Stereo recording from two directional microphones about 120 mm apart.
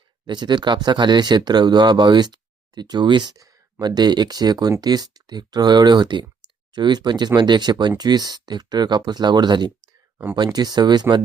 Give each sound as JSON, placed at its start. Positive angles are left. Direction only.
{"t": 0.3, "sound": "speech", "side_deg": -40}
{"t": 6.4, "sound": "clicking", "side_deg": -40}
{"t": 6.7, "sound": "speech", "side_deg": -40}